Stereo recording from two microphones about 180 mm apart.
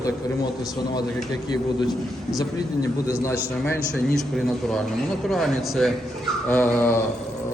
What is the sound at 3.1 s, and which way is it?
Speech, 15° left (ahead or behind).